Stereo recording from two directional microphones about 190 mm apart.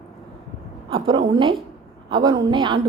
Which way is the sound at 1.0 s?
25° right (ahead or behind).